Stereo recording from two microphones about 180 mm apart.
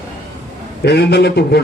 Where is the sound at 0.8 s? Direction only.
70° left (ahead or behind).